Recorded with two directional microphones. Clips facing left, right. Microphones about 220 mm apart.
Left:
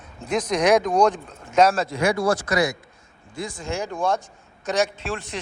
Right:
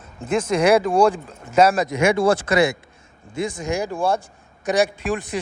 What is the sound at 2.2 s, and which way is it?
Speech, 30° right (ahead or behind).